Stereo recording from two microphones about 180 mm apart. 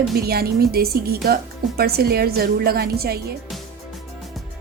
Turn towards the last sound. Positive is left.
turn(degrees=-60)  # may be behind; listen again after turning